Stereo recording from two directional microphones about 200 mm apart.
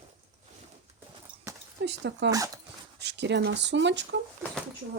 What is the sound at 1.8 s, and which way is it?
Speech, 60° right (ahead or behind).